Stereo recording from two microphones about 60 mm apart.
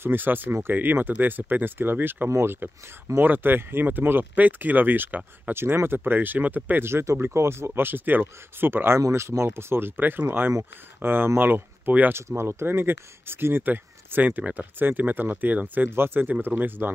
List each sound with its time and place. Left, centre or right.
0.0 s speech: right
0.7 s speech: right
2.2 s speech: right
6.8 s speech: right
9.1 s speech: right
12.1 s speech: right